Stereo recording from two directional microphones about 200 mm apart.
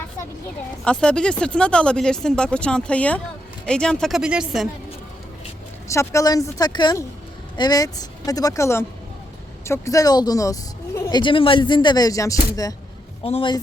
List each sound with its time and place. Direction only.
0.9 s speech: 5° left (ahead or behind)
5.9 s a woman's voice: 15° left (ahead or behind)
13.2 s speech: 25° left (ahead or behind)